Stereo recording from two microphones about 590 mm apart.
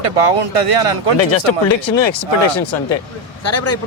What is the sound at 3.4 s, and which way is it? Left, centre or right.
Speech, left.